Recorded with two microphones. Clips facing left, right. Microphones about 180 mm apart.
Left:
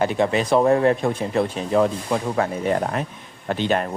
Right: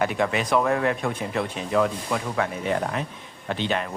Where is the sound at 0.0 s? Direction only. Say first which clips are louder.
Left 4 dB; 30° left (ahead or behind).